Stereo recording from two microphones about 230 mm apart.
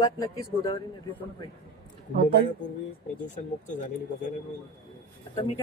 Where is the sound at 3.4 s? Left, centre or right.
Left.